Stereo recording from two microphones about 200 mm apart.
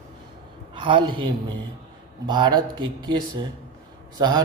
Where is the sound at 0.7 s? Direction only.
25° right (ahead or behind).